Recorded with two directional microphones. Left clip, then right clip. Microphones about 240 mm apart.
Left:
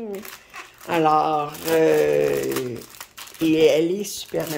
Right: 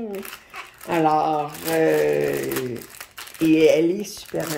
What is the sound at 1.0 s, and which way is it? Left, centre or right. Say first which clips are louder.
Speech: left 1 dB; left.